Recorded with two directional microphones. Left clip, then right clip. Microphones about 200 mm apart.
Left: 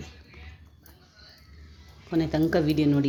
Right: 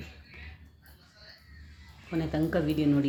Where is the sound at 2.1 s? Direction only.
25° left (ahead or behind).